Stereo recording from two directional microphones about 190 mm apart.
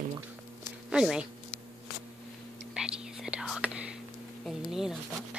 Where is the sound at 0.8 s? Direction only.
5° right (ahead or behind).